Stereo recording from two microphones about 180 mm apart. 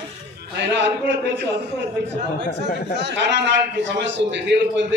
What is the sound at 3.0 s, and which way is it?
A man's voice, 75° right (ahead or behind).